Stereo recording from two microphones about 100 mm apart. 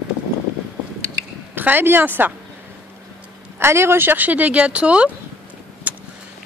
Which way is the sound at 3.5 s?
25° right (ahead or behind).